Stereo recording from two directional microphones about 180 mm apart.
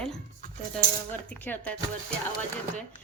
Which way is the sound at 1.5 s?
10° left (ahead or behind).